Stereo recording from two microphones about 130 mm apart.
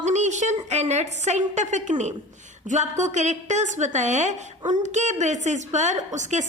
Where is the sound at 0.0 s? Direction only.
65° right (ahead or behind).